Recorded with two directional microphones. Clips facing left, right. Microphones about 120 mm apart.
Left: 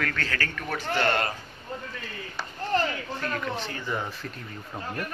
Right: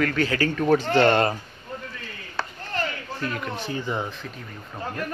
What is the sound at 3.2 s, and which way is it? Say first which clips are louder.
Speech: right 2 dB; 5° right (ahead or behind).